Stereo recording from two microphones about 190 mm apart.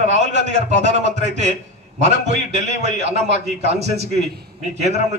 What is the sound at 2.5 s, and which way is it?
A man's voice, 35° right (ahead or behind).